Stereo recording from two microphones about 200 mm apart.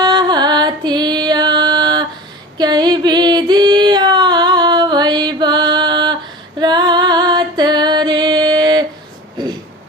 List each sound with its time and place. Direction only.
0.0 s music: 20° right (ahead or behind)
2.6 s a sound: 20° right (ahead or behind)
6.6 s music: 20° right (ahead or behind)